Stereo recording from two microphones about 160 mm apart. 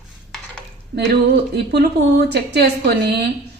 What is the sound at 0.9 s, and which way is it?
A woman's voice, 90° right.